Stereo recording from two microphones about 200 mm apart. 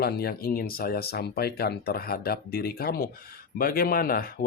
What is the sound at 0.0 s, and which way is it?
Speech, 50° left (ahead or behind).